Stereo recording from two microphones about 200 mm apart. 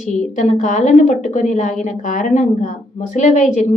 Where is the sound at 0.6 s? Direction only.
40° left (ahead or behind).